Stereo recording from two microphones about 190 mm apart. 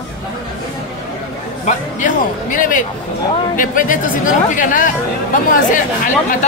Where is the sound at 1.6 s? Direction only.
45° left (ahead or behind).